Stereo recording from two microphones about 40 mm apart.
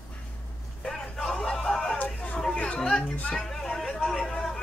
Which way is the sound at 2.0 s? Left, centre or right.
Left.